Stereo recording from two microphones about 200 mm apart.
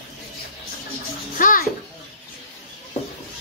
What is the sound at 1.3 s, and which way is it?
Bathtub, 40° left (ahead or behind).